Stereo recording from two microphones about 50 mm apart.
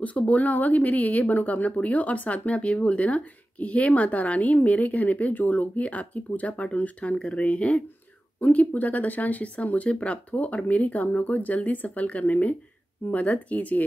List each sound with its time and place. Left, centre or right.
0.0 s speech: left